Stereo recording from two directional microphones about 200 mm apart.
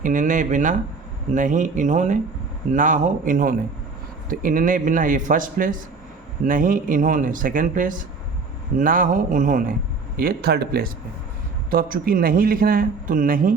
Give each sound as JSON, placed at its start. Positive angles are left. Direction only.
{"t": 0.0, "sound": "speech", "side_deg": -40}